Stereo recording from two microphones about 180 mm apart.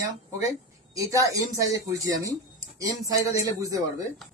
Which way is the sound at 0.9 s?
20° right (ahead or behind).